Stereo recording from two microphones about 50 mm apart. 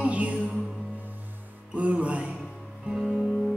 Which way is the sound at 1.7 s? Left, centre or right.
Right.